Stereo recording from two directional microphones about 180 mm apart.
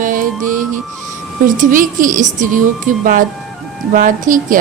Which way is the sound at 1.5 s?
45° right (ahead or behind).